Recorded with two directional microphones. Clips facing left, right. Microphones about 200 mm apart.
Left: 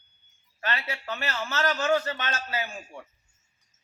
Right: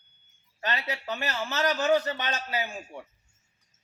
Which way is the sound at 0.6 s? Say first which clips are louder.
Right 1 dB; 20° right (ahead or behind).